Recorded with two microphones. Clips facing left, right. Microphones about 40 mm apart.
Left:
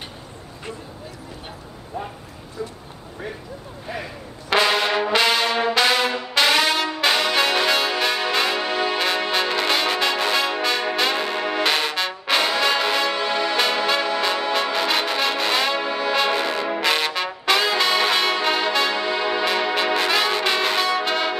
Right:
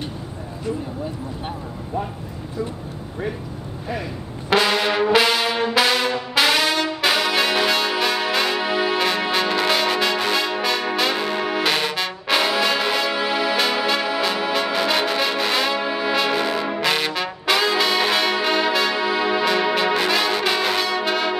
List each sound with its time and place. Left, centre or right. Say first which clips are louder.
2.0 s speech: right 4 dB; centre
3.8 s brass instrument: right 3 dB; centre